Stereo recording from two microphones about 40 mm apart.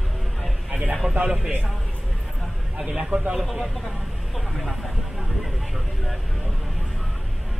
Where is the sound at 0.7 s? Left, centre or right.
Right.